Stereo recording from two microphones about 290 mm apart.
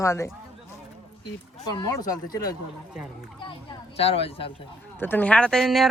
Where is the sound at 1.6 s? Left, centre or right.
Centre.